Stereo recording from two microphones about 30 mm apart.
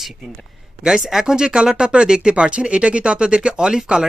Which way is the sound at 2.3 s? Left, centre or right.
Right.